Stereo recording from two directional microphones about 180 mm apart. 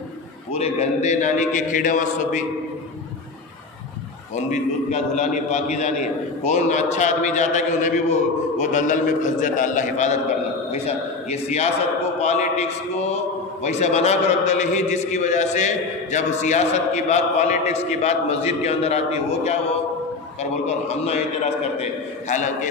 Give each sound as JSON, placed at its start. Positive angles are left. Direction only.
{"t": 0.5, "sound": "a man's voice", "side_deg": 35}
{"t": 4.5, "sound": "a man's voice", "side_deg": 40}
{"t": 11.2, "sound": "a man's voice", "side_deg": 40}
{"t": 20.6, "sound": "a man's voice", "side_deg": 35}
{"t": 22.3, "sound": "a man's voice", "side_deg": 45}